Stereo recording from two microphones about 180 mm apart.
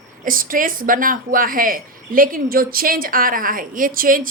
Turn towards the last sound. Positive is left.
turn(degrees=-50)  # may be behind; listen again after turning